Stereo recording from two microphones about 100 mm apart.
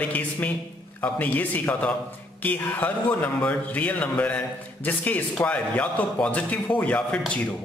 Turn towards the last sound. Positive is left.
turn(degrees=10)  # may be behind; listen again after turning